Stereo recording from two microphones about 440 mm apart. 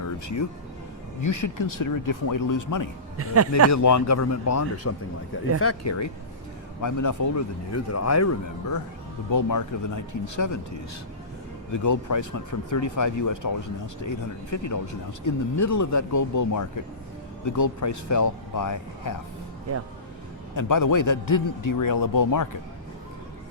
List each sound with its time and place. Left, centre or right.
0.0 s a sound: left
1.2 s speech: left
3.2 s speech: right
3.7 s speech: left
11.7 s speech: left
20.6 s speech: left